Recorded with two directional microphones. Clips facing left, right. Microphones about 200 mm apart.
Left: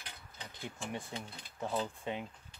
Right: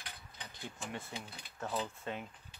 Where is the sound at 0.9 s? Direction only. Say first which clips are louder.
Left 3 dB; 15° left (ahead or behind).